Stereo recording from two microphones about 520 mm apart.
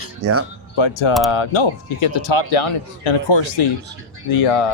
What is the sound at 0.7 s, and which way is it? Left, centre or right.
Speech, left.